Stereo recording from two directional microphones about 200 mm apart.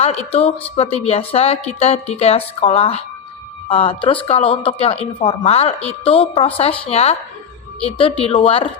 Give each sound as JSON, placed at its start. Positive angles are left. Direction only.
{"t": 0.0, "sound": "a woman's voice", "side_deg": 30}